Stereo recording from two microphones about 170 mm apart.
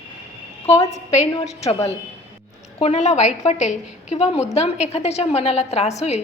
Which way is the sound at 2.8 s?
40° left (ahead or behind).